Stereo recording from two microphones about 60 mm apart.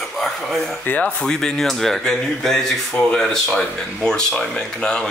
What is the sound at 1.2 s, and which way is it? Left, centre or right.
Speech, centre.